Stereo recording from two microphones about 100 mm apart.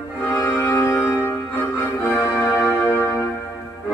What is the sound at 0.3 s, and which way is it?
Organ, 25° left (ahead or behind).